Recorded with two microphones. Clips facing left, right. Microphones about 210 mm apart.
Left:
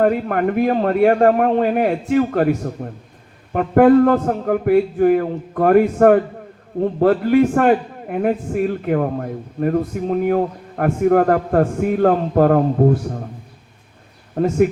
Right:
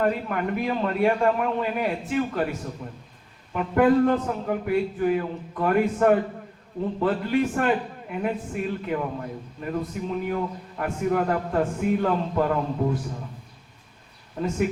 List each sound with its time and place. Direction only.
0.0 s a man's voice: 55° left (ahead or behind)
14.3 s speech: 55° left (ahead or behind)